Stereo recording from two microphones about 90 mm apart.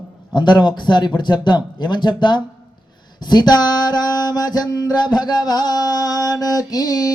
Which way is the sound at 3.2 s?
50° left (ahead or behind).